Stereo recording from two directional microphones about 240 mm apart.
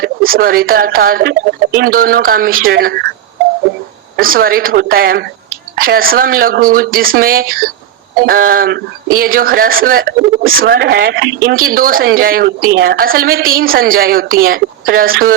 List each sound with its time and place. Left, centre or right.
0.0 s speech: right
4.2 s speech: right